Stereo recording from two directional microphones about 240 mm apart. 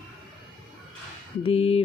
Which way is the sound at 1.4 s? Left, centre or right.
Left.